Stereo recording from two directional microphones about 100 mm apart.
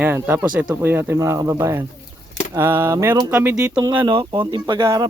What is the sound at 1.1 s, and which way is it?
Speech, 30° right (ahead or behind).